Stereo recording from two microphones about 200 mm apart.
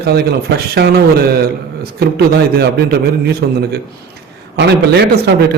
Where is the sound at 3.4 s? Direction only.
55° right (ahead or behind).